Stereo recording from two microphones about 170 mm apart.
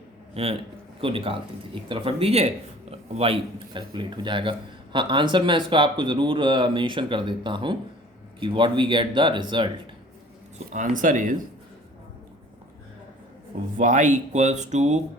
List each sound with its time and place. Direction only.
0.4 s a man's voice: 35° right (ahead or behind)
10.7 s speech: 50° right (ahead or behind)
13.7 s speech: 45° right (ahead or behind)